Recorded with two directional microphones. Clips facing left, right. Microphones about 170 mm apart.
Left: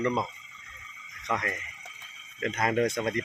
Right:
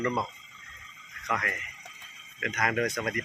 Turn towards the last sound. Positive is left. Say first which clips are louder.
# left 3 dB
turn(degrees=25)  # may be behind; listen again after turning